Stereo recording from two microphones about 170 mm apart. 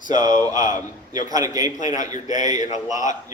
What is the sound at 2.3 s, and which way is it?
Speech, 45° left (ahead or behind).